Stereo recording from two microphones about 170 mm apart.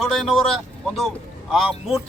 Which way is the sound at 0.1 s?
Centre (ahead or behind).